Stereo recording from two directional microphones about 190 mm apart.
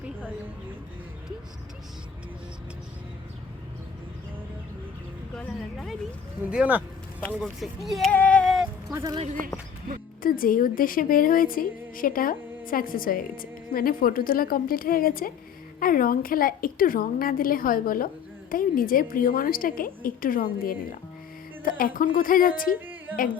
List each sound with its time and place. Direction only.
5.4 s speech: centre (ahead or behind)
8.9 s speech: 15° right (ahead or behind)
10.2 s a woman's voice: 50° left (ahead or behind)